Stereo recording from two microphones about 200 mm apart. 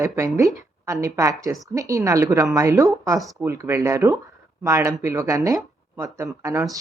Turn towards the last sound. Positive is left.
turn(degrees=-15)  # may be behind; listen again after turning